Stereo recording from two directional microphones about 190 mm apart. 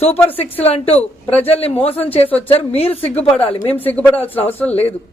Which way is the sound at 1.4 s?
30° left (ahead or behind).